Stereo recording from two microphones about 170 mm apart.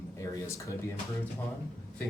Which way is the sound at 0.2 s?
15° left (ahead or behind).